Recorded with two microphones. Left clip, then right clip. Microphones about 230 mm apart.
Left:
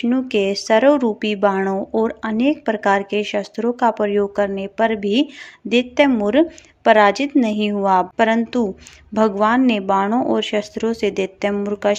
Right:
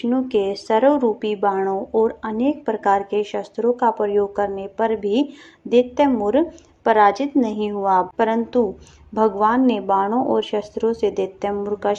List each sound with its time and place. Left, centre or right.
0.0 s speech: left